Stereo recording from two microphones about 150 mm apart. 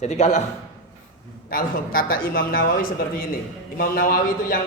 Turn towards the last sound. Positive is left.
turn(degrees=70)  # may be behind; listen again after turning